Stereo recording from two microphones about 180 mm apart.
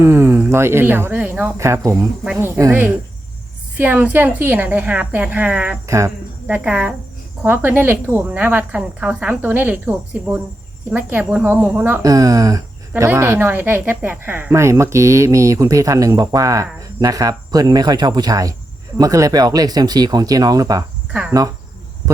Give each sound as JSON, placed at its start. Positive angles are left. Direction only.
{"t": 0.0, "sound": "speech", "side_deg": -15}
{"t": 12.0, "sound": "speech", "side_deg": -20}
{"t": 21.1, "sound": "cricket", "side_deg": -10}